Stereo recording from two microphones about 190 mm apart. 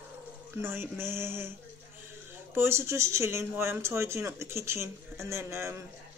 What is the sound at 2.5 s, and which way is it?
Speech, 10° right (ahead or behind).